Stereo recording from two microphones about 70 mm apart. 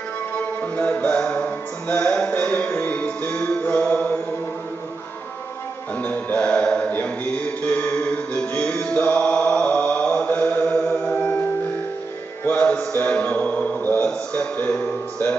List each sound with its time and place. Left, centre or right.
0.7 s music: left
5.9 s music: left
8.8 s mantra: left
12.6 s a sound: centre